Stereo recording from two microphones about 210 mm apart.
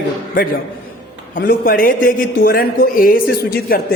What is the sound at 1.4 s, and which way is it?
A man's voice, 45° left (ahead or behind).